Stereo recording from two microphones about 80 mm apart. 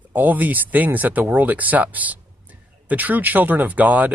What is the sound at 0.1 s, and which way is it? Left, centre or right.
Speech, right.